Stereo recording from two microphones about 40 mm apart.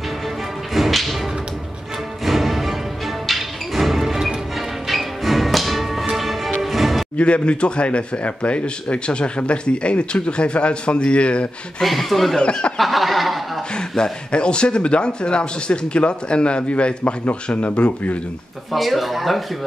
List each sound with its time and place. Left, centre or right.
0.7 s whip: centre
2.2 s music: centre
7.2 s speech: left
11.8 s speech: centre
12.4 s speech: left
12.7 s speech: centre
13.7 s speech: centre
18.7 s speech: centre